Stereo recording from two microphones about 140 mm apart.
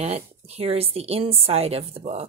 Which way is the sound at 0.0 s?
50° right (ahead or behind).